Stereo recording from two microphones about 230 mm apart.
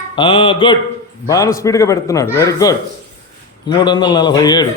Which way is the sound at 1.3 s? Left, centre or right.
Centre.